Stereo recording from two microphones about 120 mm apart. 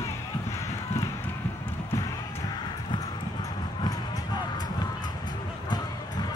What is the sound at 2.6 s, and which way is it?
Clip-clop, 35° left (ahead or behind).